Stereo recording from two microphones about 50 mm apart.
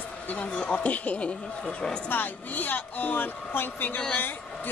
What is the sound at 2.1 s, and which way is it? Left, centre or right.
A woman's voice, left.